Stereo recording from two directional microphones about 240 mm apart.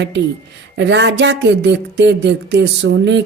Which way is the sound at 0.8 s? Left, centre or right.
Right.